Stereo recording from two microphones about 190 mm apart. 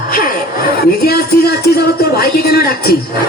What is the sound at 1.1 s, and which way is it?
Speech, 55° left (ahead or behind).